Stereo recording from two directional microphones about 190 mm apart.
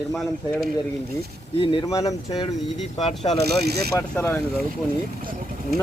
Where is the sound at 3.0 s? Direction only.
30° left (ahead or behind).